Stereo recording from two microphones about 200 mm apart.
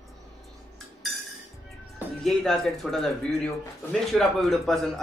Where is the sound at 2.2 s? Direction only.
Centre (ahead or behind).